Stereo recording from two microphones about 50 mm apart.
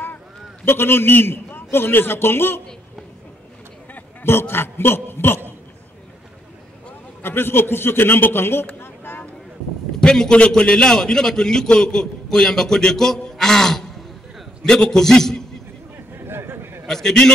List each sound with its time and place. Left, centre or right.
0.7 s a man's voice: left
4.2 s a man's voice: left
7.2 s a man's voice: left
9.9 s a sound: centre
10.6 s a man's voice: centre
16.2 s a sound: right
16.8 s a man's voice: centre